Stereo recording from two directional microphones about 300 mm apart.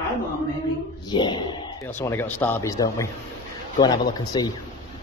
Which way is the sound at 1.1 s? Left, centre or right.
Centre.